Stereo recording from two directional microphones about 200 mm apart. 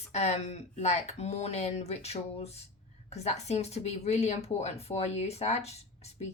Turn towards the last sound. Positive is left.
turn(degrees=30)  # may be behind; listen again after turning